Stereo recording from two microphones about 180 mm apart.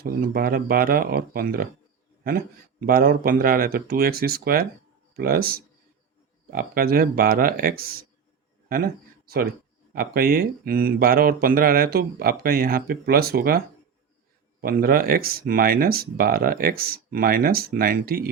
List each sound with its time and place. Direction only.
0.0 s speech: 55° right (ahead or behind)
2.8 s speech: 55° right (ahead or behind)
14.6 s speech: 55° right (ahead or behind)